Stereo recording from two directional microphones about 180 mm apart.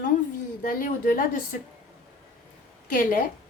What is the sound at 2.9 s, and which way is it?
Speech, 50° left (ahead or behind).